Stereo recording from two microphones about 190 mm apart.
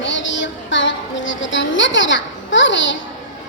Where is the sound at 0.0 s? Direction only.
75° left (ahead or behind).